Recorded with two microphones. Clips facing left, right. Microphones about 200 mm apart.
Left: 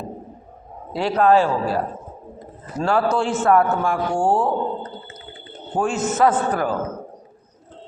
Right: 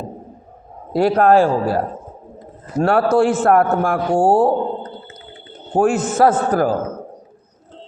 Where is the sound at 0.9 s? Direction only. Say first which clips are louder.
Right 4 dB; 55° right (ahead or behind).